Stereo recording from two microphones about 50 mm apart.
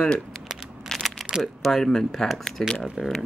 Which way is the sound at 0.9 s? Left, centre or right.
Centre.